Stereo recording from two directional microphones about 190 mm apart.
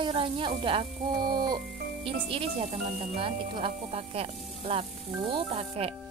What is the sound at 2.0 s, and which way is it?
Speech, 30° right (ahead or behind).